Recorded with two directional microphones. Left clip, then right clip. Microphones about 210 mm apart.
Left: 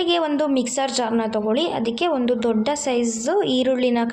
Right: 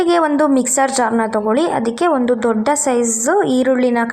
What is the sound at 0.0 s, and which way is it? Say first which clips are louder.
A woman's voice: right 6 dB; 25° right (ahead or behind).